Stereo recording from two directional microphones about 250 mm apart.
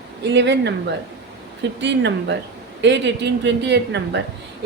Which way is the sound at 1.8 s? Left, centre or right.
Right.